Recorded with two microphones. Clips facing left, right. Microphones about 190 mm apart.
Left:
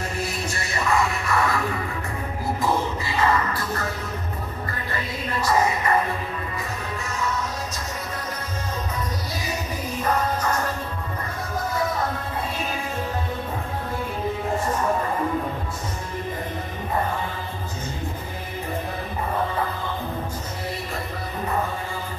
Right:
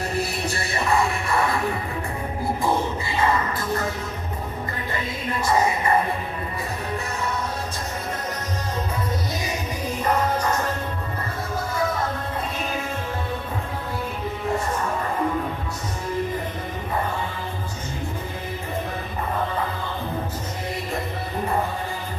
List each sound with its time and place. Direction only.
0.1 s music: 35° right (ahead or behind)
2.6 s a sound: 25° right (ahead or behind)
5.4 s music: 25° right (ahead or behind)